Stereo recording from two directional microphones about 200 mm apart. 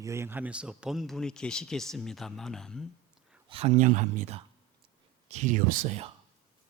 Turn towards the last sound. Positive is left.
turn(degrees=-30)  # may be behind; listen again after turning